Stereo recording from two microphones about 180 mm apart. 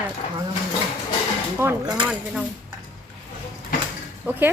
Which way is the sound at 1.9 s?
5° right (ahead or behind).